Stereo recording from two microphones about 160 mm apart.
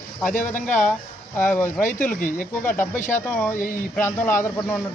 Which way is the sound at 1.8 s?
55° left (ahead or behind).